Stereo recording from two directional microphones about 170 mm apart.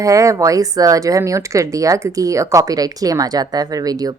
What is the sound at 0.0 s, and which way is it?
Speech, 20° right (ahead or behind).